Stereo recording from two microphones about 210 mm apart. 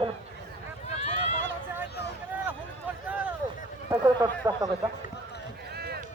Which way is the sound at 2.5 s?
5° right (ahead or behind).